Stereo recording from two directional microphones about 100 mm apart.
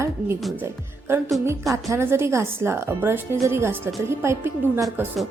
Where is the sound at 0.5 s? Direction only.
20° right (ahead or behind).